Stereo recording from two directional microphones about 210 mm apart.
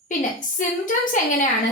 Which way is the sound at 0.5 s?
40° left (ahead or behind).